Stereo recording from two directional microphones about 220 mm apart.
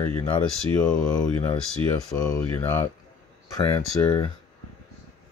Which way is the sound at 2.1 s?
15° left (ahead or behind).